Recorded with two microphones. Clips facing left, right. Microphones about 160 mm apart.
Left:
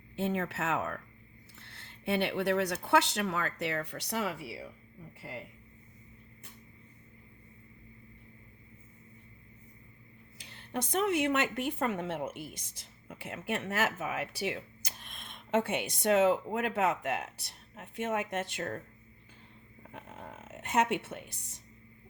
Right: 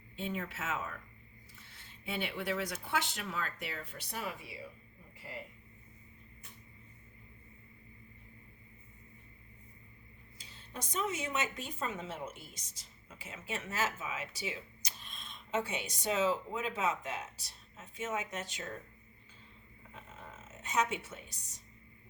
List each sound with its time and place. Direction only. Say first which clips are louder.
0.2 s speech: left 7 dB; 75° left (ahead or behind)
10.3 s a woman's voice: left 10 dB; 70° left (ahead or behind)
19.9 s a sound: left 5 dB; 60° left (ahead or behind)